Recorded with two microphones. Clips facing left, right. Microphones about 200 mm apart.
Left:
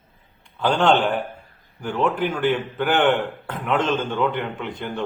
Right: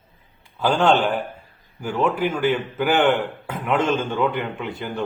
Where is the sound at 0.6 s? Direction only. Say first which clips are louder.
Even; 5° right (ahead or behind).